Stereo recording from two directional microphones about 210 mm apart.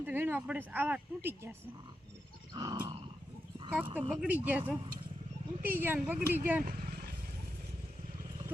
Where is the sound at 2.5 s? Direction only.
20° right (ahead or behind).